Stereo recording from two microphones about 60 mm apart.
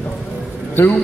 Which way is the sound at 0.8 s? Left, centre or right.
Left.